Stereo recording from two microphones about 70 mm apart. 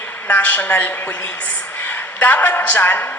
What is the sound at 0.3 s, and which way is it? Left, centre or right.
A woman's voice, left.